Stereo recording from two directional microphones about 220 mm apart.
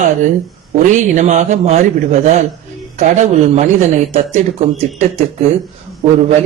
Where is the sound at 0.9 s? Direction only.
35° right (ahead or behind).